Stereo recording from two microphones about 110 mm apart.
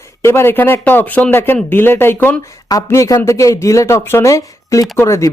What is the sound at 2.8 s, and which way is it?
Speech, 30° left (ahead or behind).